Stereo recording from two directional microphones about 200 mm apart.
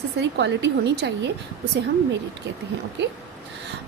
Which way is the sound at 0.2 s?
60° right (ahead or behind).